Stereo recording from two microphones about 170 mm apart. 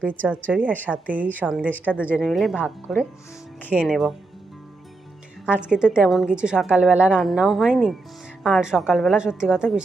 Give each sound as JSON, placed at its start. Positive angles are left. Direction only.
{"t": 0.1, "sound": "a woman's voice", "side_deg": -10}
{"t": 5.5, "sound": "a woman's voice", "side_deg": -5}